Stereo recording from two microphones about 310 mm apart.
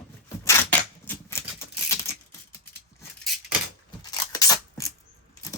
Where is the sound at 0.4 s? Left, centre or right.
Centre.